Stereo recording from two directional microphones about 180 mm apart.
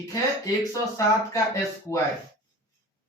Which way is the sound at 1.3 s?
20° left (ahead or behind).